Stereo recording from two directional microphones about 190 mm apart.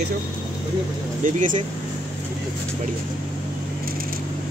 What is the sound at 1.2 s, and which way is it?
Speech, 45° right (ahead or behind).